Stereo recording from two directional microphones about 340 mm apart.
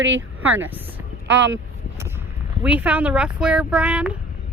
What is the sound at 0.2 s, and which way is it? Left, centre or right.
Speech, centre.